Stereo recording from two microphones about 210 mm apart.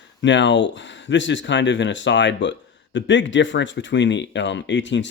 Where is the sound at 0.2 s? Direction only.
60° left (ahead or behind).